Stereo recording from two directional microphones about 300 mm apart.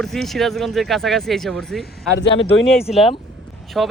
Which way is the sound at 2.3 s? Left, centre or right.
Centre.